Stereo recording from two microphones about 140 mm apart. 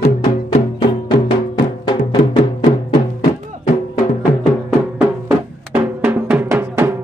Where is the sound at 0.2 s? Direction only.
35° left (ahead or behind).